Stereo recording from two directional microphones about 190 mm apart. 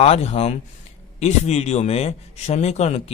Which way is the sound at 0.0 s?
30° left (ahead or behind).